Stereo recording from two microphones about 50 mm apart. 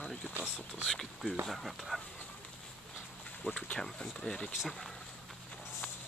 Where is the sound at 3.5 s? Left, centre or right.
Left.